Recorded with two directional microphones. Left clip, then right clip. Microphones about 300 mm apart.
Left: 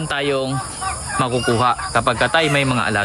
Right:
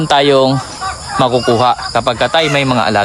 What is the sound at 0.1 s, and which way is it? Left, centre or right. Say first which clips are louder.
Speech: right 11 dB; centre.